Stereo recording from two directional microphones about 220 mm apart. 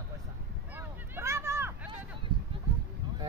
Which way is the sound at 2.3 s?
20° right (ahead or behind).